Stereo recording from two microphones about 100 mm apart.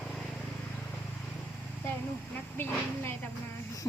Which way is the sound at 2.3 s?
20° left (ahead or behind).